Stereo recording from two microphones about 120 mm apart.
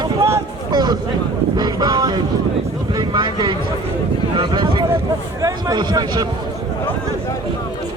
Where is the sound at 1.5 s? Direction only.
35° right (ahead or behind).